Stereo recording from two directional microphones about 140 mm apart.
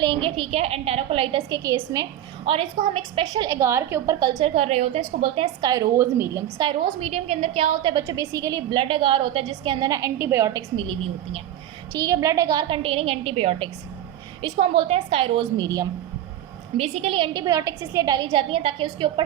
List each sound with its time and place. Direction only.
0.0 s a woman's voice: 35° right (ahead or behind)
1.5 s a woman's voice: 30° right (ahead or behind)
2.5 s a woman's voice: 40° right (ahead or behind)
3.2 s a woman's voice: 25° right (ahead or behind)
4.4 s a woman's voice: 45° right (ahead or behind)
5.5 s a woman's voice: 25° right (ahead or behind)
6.6 s a woman's voice: 35° right (ahead or behind)
8.0 s a woman's voice: 25° right (ahead or behind)
8.7 s a woman's voice: 40° right (ahead or behind); by 10.6 s 20° right (ahead or behind)
11.9 s a woman's voice: 25° right (ahead or behind)
16.7 s a woman's voice: 45° right (ahead or behind)